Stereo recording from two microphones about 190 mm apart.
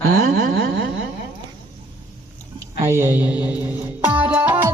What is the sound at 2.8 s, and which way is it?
Speech, 10° right (ahead or behind).